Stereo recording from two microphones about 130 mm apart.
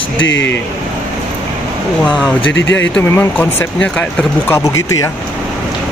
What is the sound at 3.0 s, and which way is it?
Speech, 15° left (ahead or behind).